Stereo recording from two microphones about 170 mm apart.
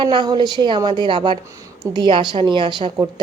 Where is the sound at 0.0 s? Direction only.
30° right (ahead or behind).